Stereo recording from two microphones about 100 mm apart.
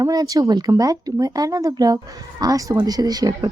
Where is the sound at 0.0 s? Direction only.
40° right (ahead or behind).